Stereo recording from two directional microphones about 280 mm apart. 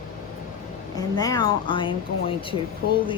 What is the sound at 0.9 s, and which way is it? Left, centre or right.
Speech, centre.